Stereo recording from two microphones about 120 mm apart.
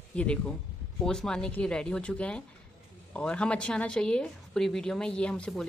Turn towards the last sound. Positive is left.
turn(degrees=5)  # may be behind; listen again after turning